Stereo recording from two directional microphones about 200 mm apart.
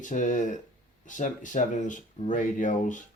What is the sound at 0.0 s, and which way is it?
Speech, 40° left (ahead or behind).